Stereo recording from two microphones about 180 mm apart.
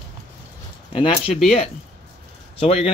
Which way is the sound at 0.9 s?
30° left (ahead or behind).